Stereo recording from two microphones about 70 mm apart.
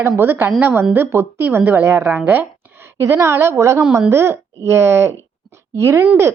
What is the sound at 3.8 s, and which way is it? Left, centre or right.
Speech, centre.